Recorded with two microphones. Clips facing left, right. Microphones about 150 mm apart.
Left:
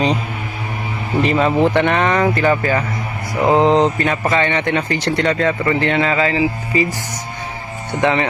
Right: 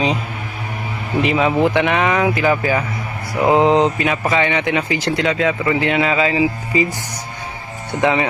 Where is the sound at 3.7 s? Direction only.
5° right (ahead or behind).